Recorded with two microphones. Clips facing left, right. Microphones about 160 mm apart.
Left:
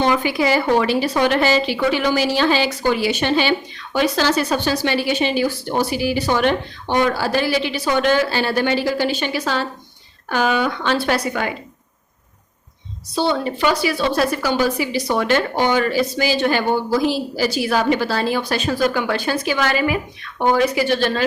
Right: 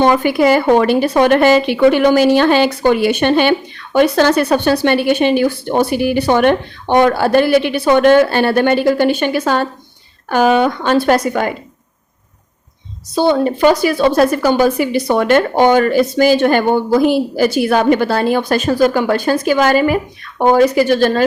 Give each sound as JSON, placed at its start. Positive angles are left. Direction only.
{"t": 0.0, "sound": "a woman's voice", "side_deg": -50}
{"t": 13.1, "sound": "speech", "side_deg": -45}